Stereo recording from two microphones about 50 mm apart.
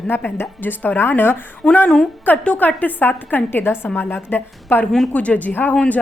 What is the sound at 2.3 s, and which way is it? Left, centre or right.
A woman's voice, left.